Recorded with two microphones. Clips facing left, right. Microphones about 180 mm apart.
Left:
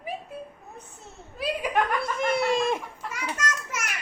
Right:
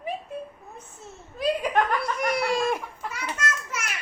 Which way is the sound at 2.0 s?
25° left (ahead or behind).